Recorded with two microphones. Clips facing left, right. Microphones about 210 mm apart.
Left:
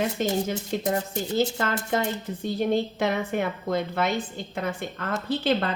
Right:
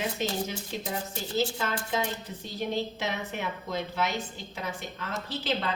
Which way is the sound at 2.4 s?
55° left (ahead or behind).